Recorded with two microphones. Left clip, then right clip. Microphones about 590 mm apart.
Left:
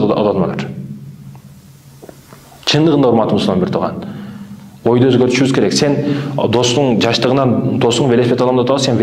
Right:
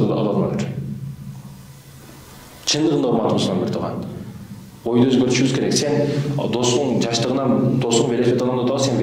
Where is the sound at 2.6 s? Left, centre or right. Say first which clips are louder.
Left 7 dB; left.